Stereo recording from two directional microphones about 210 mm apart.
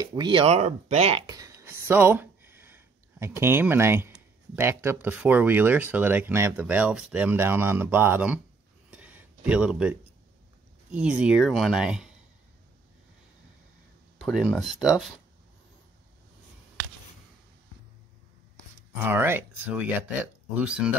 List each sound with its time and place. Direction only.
0.0 s speech: 20° right (ahead or behind)
1.2 s a sound: 15° right (ahead or behind)
4.6 s speech: 10° right (ahead or behind)
8.9 s a sound: 5° right (ahead or behind)
10.9 s speech: 5° right (ahead or behind)
14.1 s speech: centre (ahead or behind)
19.0 s speech: 10° right (ahead or behind)